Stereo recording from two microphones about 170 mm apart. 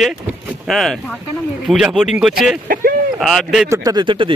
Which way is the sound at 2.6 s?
55° right (ahead or behind).